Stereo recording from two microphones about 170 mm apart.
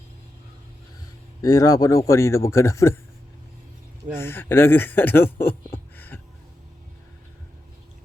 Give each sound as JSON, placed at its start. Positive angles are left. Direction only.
{"t": 1.4, "sound": "a man's voice", "side_deg": 20}
{"t": 4.2, "sound": "speech", "side_deg": 15}